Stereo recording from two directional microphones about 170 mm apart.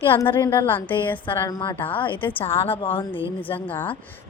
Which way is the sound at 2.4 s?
35° left (ahead or behind).